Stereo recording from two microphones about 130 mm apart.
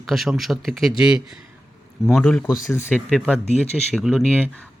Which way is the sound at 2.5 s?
20° left (ahead or behind).